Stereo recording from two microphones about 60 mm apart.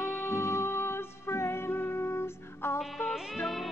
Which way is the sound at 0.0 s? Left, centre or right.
Left.